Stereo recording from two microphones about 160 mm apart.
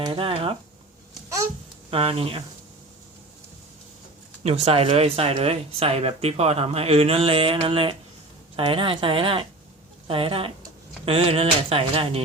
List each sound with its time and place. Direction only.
0.0 s speech: 35° right (ahead or behind)
1.9 s speech: 35° right (ahead or behind)
4.4 s speech: 40° right (ahead or behind)